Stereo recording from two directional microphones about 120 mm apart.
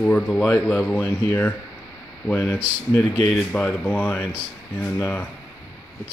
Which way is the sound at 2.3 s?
10° left (ahead or behind).